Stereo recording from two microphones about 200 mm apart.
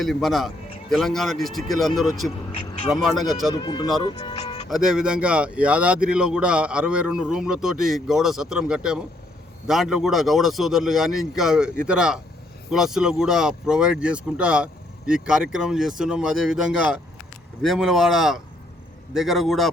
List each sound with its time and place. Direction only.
0.0 s speech: centre (ahead or behind)
3.5 s speech: 20° left (ahead or behind)
4.7 s speech: 5° right (ahead or behind)